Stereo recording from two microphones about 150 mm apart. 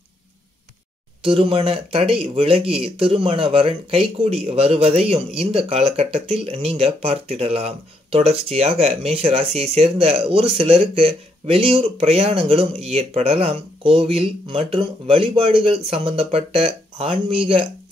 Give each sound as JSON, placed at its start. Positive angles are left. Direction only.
{"t": 1.2, "sound": "speech", "side_deg": -35}